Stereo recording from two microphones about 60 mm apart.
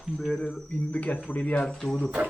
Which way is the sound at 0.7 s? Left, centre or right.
Left.